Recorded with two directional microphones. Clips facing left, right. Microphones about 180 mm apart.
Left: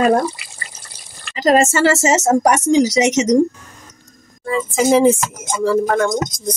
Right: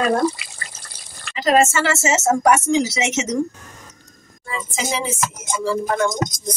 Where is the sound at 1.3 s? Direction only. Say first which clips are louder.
Left 3 dB; 40° left (ahead or behind).